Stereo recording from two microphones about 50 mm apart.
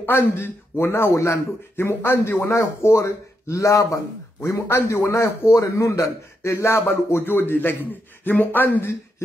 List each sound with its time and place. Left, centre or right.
0.0 s speech: left
4.5 s a man's voice: left
8.2 s speech: left